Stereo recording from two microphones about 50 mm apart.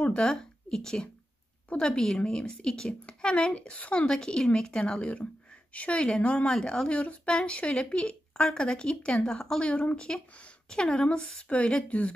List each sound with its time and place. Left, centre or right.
0.2 s a woman's voice: centre
4.1 s a woman's voice: centre
7.0 s speech: left